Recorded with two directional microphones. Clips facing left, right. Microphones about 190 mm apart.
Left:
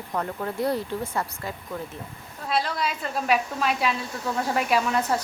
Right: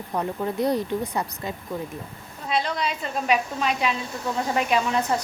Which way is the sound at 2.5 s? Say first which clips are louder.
Right 1 dB; 5° left (ahead or behind).